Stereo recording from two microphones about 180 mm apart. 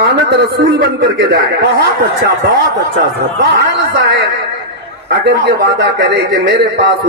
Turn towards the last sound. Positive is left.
turn(degrees=-75)  # may be behind; listen again after turning